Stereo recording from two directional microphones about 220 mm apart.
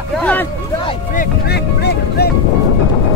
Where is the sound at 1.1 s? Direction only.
50° left (ahead or behind).